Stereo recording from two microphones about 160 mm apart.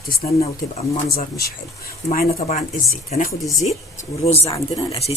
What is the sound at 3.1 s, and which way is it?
Speech, 50° left (ahead or behind).